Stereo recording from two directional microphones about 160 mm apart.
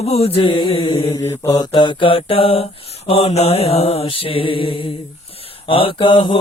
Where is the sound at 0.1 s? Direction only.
40° left (ahead or behind).